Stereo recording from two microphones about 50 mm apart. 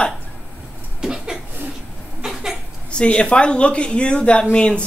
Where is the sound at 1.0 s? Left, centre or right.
Centre.